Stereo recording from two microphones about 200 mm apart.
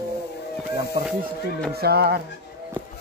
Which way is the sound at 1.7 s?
50° right (ahead or behind).